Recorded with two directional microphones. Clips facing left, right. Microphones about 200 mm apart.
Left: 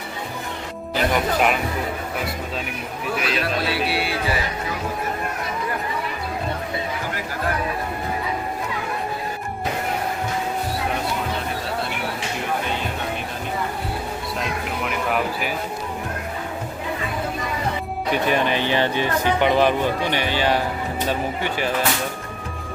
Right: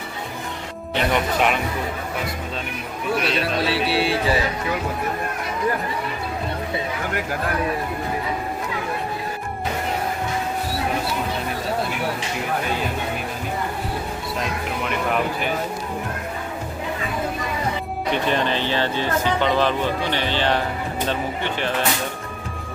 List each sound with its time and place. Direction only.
0.9 s speech: centre (ahead or behind)
3.2 s speech: 5° left (ahead or behind)
3.8 s speech: 30° right (ahead or behind)
14.8 s speech: 5° left (ahead or behind)
18.1 s speech: 10° left (ahead or behind)